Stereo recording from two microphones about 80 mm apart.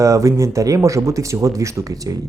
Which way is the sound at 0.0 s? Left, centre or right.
Right.